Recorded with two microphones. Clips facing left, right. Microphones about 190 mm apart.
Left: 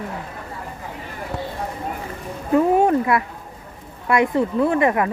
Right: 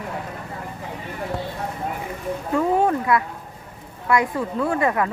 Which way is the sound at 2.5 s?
25° left (ahead or behind).